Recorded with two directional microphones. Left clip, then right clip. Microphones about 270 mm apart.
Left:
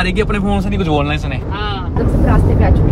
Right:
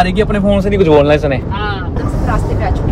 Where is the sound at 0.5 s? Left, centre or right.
Centre.